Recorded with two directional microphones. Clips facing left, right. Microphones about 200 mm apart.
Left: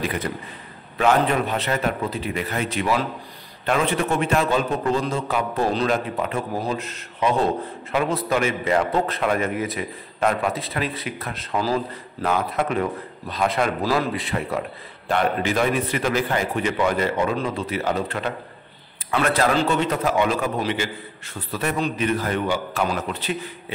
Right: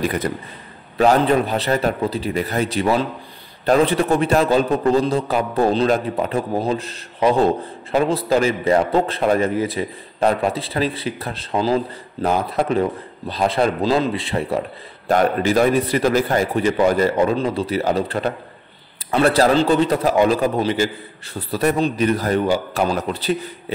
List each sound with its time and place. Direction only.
0.0 s a man's voice: 40° right (ahead or behind)
15.0 s a man's voice: 40° right (ahead or behind)